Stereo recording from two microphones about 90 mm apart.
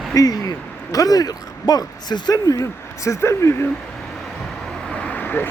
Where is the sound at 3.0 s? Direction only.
30° left (ahead or behind).